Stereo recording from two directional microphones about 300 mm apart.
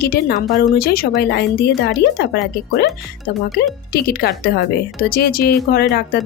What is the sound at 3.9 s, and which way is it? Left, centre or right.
Speech, left.